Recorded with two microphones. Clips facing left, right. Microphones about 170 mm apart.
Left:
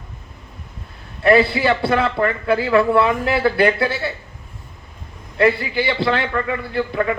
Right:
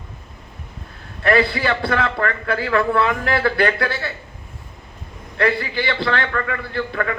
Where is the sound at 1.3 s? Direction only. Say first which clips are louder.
Left 3 dB; 25° left (ahead or behind).